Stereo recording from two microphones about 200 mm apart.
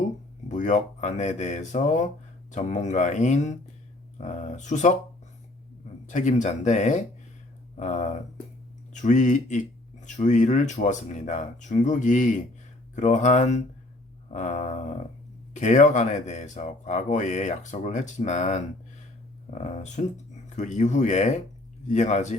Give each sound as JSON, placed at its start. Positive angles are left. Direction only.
{"t": 0.4, "sound": "speech", "side_deg": 35}
{"t": 6.1, "sound": "speech", "side_deg": 40}